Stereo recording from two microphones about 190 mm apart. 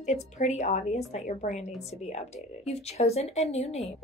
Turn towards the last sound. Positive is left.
turn(degrees=35)  # may be behind; listen again after turning